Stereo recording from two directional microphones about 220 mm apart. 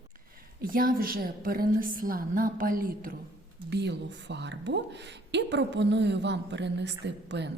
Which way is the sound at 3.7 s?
50° right (ahead or behind).